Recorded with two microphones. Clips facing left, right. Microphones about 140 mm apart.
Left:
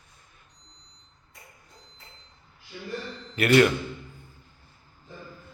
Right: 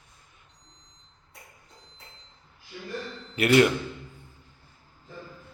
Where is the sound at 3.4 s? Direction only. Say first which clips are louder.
Even; 20° right (ahead or behind).